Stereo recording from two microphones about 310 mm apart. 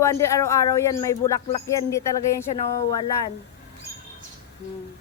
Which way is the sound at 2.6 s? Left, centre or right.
Centre.